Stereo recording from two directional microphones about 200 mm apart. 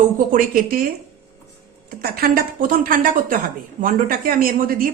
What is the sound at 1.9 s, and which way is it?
A woman's voice, 50° right (ahead or behind).